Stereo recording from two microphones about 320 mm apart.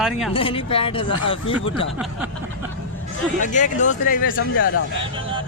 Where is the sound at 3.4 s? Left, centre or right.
Left.